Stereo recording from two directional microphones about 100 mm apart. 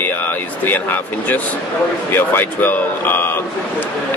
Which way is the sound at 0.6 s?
20° left (ahead or behind).